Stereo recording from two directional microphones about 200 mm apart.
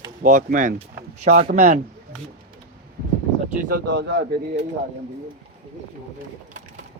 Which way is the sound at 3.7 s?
60° right (ahead or behind).